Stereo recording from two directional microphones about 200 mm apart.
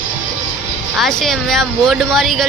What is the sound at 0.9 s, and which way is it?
Speech, centre (ahead or behind).